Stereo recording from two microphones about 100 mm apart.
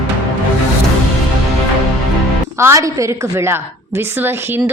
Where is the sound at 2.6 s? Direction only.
30° right (ahead or behind).